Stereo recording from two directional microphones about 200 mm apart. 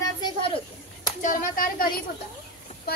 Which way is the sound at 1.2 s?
45° left (ahead or behind).